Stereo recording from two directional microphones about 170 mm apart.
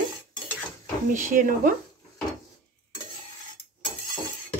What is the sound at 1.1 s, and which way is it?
Speech, 50° right (ahead or behind).